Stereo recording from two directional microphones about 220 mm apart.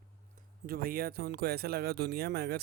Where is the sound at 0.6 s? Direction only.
45° right (ahead or behind).